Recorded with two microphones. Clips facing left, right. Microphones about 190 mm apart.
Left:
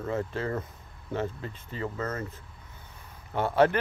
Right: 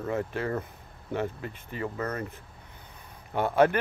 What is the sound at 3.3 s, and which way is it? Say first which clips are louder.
Speech: right 1 dB; 15° right (ahead or behind).